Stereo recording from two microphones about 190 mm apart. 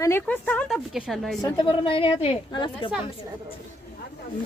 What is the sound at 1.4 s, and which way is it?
Speech, 25° left (ahead or behind).